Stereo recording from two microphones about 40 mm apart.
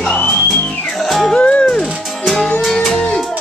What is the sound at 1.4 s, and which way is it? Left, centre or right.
Music, left.